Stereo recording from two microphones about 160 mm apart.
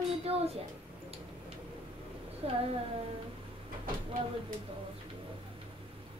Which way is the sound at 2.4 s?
35° right (ahead or behind).